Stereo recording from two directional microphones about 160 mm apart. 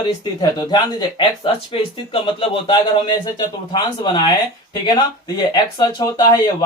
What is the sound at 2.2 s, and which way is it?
Speech, 30° left (ahead or behind).